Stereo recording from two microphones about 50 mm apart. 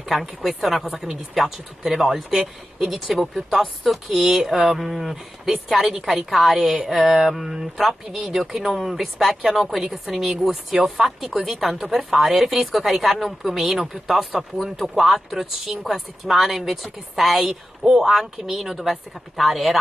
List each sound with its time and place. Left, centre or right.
0.1 s a woman's voice: centre